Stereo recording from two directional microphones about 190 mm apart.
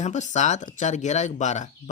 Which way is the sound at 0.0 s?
40° left (ahead or behind).